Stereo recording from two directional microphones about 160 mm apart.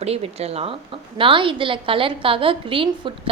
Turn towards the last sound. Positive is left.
turn(degrees=-35)  # may be behind; listen again after turning